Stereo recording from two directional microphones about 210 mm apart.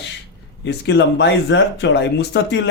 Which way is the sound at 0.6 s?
55° left (ahead or behind).